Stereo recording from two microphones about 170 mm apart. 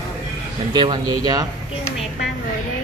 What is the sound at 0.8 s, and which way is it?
Speech, 25° right (ahead or behind).